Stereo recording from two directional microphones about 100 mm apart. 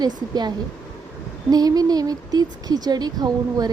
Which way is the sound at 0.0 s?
45° right (ahead or behind).